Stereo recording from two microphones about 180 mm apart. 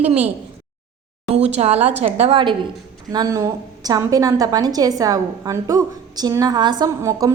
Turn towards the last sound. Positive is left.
turn(degrees=-15)  # may be behind; listen again after turning